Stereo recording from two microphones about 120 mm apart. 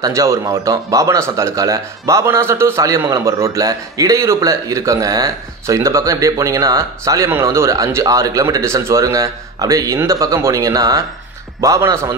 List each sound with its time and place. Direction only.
0.0 s a man's voice: 25° right (ahead or behind)